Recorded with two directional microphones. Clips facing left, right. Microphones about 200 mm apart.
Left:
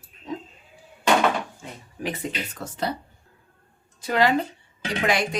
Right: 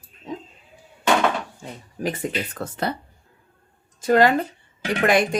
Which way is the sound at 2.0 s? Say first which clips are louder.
Right 4 dB; 45° right (ahead or behind).